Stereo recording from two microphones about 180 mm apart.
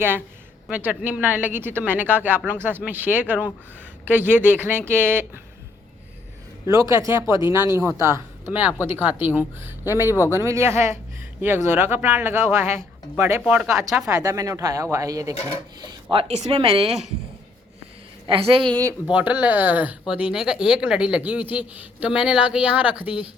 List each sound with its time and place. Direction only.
0.7 s speech: 10° right (ahead or behind)
6.7 s speech: 20° right (ahead or behind)
10.1 s speech: 15° left (ahead or behind)
10.3 s speech: 15° right (ahead or behind)
13.4 s speech: 5° right (ahead or behind)
14.1 s speech: 20° right (ahead or behind)
15.8 s speech: 30° right (ahead or behind)
18.3 s a woman's voice: 30° right (ahead or behind)
19.0 s speech: 10° right (ahead or behind)